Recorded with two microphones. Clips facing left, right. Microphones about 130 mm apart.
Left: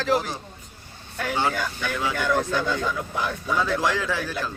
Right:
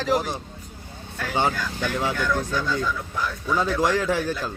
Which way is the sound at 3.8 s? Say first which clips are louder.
Right 3 dB; 45° right (ahead or behind).